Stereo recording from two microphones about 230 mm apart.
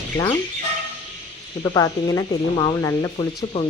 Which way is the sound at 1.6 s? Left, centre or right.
Centre.